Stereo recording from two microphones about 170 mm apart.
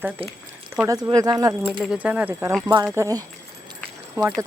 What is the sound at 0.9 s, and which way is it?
Speech, 20° right (ahead or behind).